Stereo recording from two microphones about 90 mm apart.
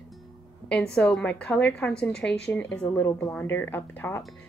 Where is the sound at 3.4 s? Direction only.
25° left (ahead or behind).